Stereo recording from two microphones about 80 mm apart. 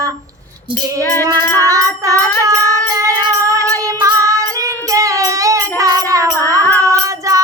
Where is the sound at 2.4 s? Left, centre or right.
Right.